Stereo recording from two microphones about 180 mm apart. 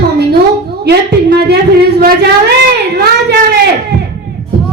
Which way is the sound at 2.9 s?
65° right (ahead or behind).